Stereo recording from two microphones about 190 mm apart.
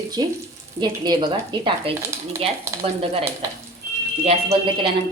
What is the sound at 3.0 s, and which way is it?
A woman's voice, 30° right (ahead or behind).